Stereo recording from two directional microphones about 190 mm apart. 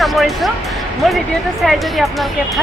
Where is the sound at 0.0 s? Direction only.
Centre (ahead or behind).